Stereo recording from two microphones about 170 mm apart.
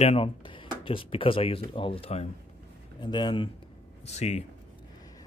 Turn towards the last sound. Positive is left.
turn(degrees=40)  # may be behind; listen again after turning